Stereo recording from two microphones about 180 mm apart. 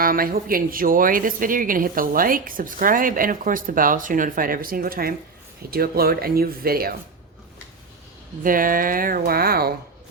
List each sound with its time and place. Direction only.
0.0 s speech: 55° right (ahead or behind)
8.4 s speech: 50° right (ahead or behind)